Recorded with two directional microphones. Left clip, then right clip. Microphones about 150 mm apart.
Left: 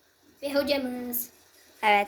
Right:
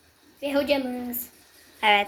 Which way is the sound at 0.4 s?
40° right (ahead or behind).